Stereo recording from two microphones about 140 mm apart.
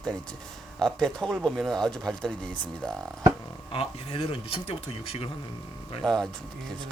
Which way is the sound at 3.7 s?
40° left (ahead or behind).